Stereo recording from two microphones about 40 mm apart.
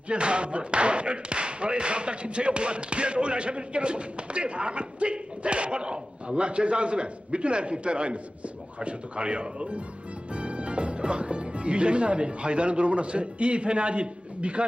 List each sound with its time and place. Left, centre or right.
0.1 s speech: right